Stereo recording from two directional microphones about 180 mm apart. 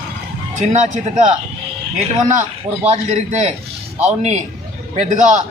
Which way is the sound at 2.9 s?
40° right (ahead or behind).